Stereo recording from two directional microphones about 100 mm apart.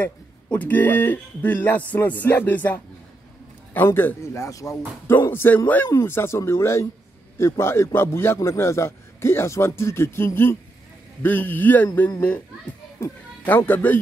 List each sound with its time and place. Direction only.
0.0 s a man's voice: 15° left (ahead or behind); by 5.1 s 30° left (ahead or behind)
5.1 s a man's voice: 20° left (ahead or behind)
13.4 s a man's voice: 20° left (ahead or behind)